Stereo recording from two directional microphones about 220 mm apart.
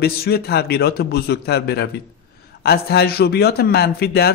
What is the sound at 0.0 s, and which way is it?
A man's voice, 45° left (ahead or behind).